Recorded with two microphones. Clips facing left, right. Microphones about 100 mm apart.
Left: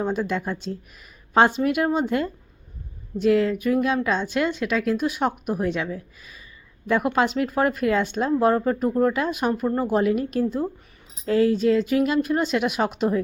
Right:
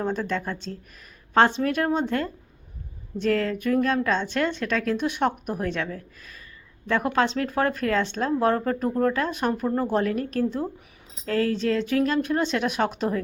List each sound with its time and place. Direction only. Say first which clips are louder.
0.0 s speech: left 2 dB; 10° left (ahead or behind)